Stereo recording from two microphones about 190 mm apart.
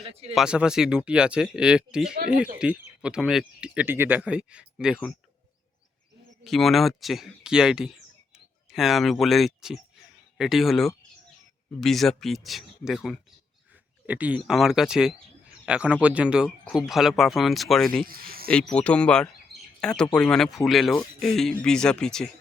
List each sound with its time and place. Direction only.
0.1 s speech: 30° right (ahead or behind)
0.3 s speech: 5° right (ahead or behind)
6.4 s speech: centre (ahead or behind)
18.0 s speech: 50° right (ahead or behind)
18.5 s speech: 5° left (ahead or behind)